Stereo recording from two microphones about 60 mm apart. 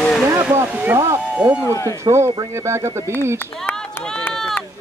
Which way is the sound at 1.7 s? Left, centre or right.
Left.